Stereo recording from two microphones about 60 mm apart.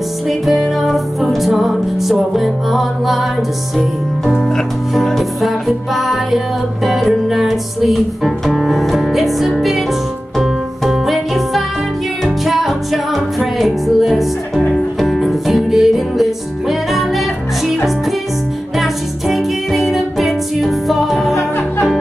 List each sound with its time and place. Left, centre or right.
0.3 s music: centre
4.4 s music: centre
18.8 s music: centre
21.4 s music: left